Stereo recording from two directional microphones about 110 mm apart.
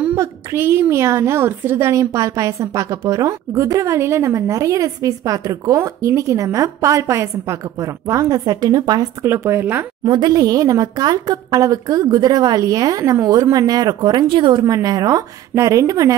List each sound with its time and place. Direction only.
0.1 s a woman's voice: 25° right (ahead or behind)
9.2 s a woman's voice: 25° right (ahead or behind)
10.0 s speech: 40° right (ahead or behind)